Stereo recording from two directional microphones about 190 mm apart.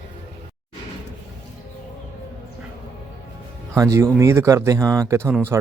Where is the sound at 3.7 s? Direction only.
15° right (ahead or behind).